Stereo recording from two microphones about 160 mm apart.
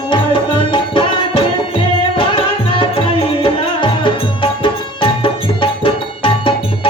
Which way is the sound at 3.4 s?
35° left (ahead or behind).